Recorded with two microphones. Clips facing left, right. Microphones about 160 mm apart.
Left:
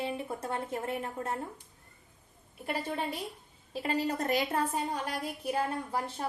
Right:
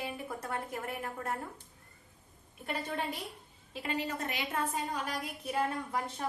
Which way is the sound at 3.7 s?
35° left (ahead or behind).